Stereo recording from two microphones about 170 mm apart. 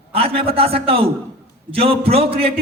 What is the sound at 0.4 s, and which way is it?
Speech, 35° right (ahead or behind).